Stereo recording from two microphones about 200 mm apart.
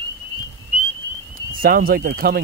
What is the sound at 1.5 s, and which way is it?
Speech, 45° right (ahead or behind).